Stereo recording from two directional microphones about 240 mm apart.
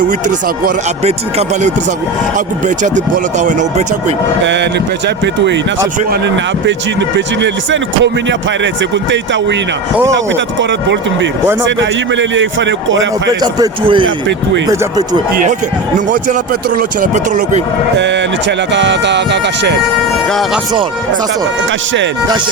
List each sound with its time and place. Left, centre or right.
0.0 s speech: right
4.4 s speech: right
13.4 s a man's voice: centre
16.0 s speech: right
17.9 s speech: right
20.2 s speech: centre